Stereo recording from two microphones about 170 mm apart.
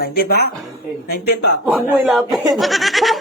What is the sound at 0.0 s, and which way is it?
Speech, 65° left (ahead or behind).